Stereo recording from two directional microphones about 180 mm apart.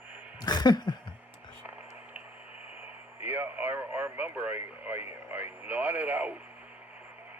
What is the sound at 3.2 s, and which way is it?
Speech, 10° right (ahead or behind).